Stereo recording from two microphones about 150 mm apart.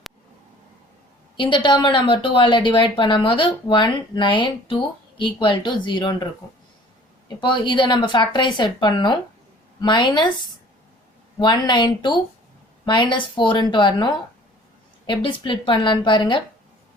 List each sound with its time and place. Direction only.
1.4 s a woman's voice: 30° left (ahead or behind)
7.3 s a woman's voice: 30° left (ahead or behind)